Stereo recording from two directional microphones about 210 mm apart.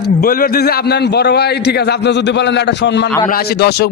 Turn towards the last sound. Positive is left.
turn(degrees=50)  # may be behind; listen again after turning